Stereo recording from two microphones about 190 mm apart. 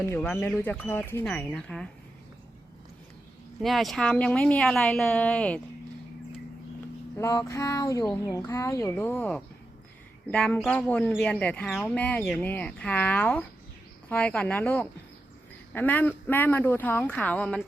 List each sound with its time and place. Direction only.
0.1 s speech: 10° left (ahead or behind)
3.6 s speech: centre (ahead or behind)
7.2 s speech: 15° left (ahead or behind)